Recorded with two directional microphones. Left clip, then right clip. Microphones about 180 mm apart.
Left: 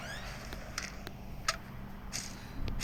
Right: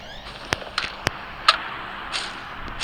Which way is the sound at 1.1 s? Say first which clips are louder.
Right 17 dB; 40° right (ahead or behind).